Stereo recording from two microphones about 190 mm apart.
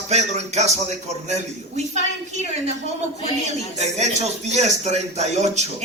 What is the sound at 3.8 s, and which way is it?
Speech, 35° right (ahead or behind).